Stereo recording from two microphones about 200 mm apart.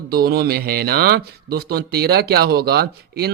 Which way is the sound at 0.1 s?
50° right (ahead or behind).